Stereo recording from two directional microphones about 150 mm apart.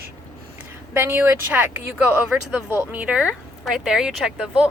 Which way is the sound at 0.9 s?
15° right (ahead or behind).